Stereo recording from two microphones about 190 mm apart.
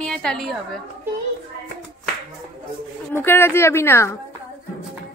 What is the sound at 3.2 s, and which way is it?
A woman's voice, 10° left (ahead or behind).